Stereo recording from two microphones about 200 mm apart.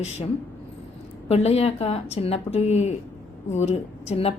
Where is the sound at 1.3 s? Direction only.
30° left (ahead or behind).